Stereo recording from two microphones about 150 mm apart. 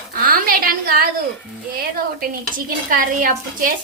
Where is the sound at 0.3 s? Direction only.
75° right (ahead or behind).